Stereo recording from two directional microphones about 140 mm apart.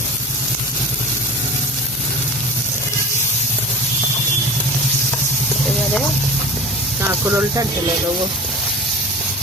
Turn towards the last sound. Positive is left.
turn(degrees=-15)  # may be behind; listen again after turning